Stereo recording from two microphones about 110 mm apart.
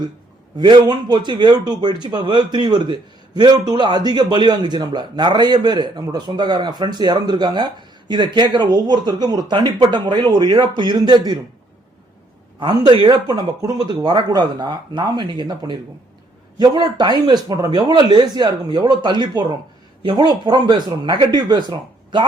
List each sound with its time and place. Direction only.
0.6 s speech: 45° right (ahead or behind)
12.5 s speech: 40° right (ahead or behind)